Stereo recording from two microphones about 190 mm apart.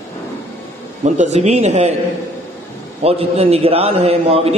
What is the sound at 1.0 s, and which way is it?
Speech, 35° right (ahead or behind).